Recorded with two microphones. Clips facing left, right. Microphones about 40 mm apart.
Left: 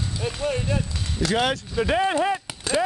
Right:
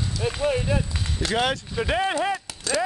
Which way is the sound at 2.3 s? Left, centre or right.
Left.